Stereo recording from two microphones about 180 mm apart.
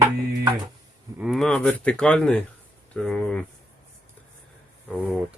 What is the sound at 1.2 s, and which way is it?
Speech, centre (ahead or behind).